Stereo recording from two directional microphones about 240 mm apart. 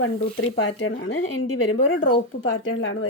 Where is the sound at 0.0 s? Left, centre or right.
Left.